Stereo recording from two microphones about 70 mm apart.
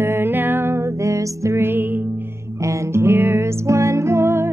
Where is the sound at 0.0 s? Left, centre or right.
Right.